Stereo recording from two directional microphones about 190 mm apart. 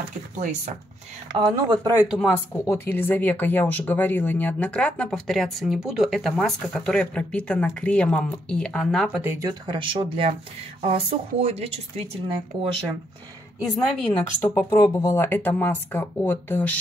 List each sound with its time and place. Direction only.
0.4 s speech: 40° right (ahead or behind)
1.4 s speech: 20° right (ahead or behind)
2.1 s speech: 5° left (ahead or behind)
9.2 s speech: 15° right (ahead or behind); by 12.2 s 35° right (ahead or behind)
13.6 s speech: centre (ahead or behind)